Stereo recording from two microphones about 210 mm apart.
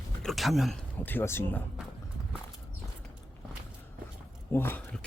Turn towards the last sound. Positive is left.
turn(degrees=5)  # may be behind; listen again after turning